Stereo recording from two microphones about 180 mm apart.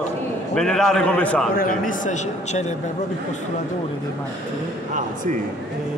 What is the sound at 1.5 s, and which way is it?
A man's voice, 50° left (ahead or behind).